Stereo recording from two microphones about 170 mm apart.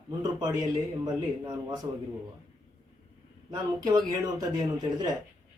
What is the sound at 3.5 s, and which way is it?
Speech, 25° right (ahead or behind).